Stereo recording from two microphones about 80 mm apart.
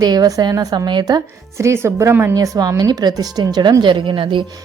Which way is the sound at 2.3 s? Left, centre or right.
Right.